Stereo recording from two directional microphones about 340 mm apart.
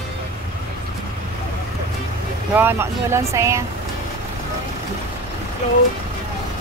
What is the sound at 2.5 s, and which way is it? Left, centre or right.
Speech, centre.